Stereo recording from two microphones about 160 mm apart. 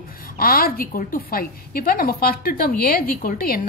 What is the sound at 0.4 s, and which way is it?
A woman's voice, 65° left (ahead or behind).